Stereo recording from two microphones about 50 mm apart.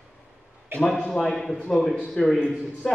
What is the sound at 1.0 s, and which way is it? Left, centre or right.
A man's voice, centre.